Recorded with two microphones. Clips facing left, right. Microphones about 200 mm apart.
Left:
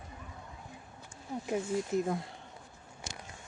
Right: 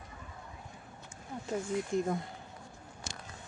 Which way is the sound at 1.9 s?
Centre (ahead or behind).